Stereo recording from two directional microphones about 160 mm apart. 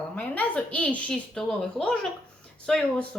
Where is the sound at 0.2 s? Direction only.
10° left (ahead or behind).